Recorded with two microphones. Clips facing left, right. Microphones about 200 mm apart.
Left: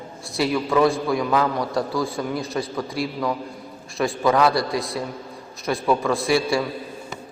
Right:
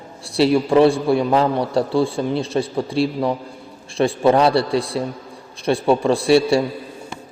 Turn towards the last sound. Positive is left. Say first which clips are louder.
# right 6 dB
turn(degrees=-30)  # may be behind; listen again after turning